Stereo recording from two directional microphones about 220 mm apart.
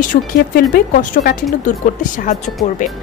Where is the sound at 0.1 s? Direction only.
45° left (ahead or behind).